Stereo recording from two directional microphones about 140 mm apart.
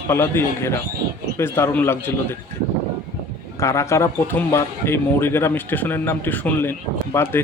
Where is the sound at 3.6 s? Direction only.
20° left (ahead or behind).